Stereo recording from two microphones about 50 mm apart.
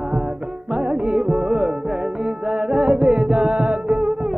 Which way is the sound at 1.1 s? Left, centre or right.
Centre.